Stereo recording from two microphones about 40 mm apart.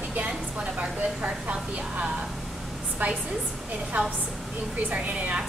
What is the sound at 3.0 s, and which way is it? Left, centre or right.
Speech, right.